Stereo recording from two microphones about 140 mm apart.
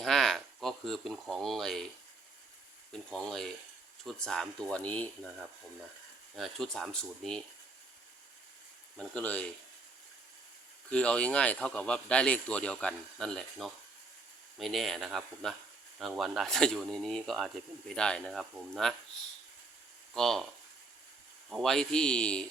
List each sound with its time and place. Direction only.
0.0 s speech: 5° left (ahead or behind)
3.1 s speech: 5° left (ahead or behind)
6.3 s speech: centre (ahead or behind)
9.0 s speech: 10° left (ahead or behind)
10.8 s speech: 10° left (ahead or behind)
20.1 s speech: 5° left (ahead or behind)
21.5 s speech: centre (ahead or behind)